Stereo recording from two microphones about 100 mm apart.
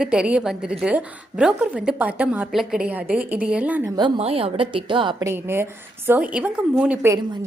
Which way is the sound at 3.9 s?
50° right (ahead or behind).